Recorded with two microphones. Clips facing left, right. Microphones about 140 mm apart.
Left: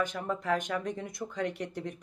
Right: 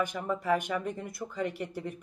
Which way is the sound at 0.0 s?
10° right (ahead or behind).